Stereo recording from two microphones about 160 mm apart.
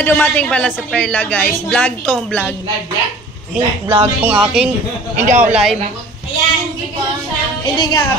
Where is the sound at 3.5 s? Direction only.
10° right (ahead or behind).